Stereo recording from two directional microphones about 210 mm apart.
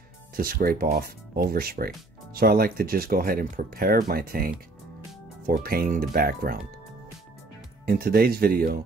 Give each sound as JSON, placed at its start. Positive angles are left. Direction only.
{"t": 0.4, "sound": "speech", "side_deg": -45}
{"t": 5.5, "sound": "speech", "side_deg": -45}
{"t": 7.8, "sound": "speech", "side_deg": -45}